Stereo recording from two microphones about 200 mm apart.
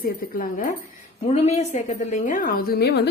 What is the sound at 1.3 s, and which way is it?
A woman's voice, 35° left (ahead or behind).